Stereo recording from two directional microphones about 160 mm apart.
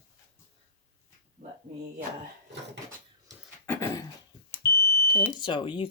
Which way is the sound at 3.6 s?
15° left (ahead or behind).